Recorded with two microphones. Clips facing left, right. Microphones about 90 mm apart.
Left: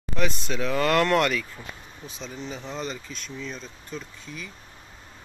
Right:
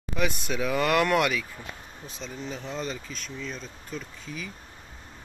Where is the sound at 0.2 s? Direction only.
10° right (ahead or behind).